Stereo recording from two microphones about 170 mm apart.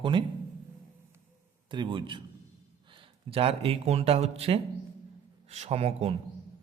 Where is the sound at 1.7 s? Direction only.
30° right (ahead or behind).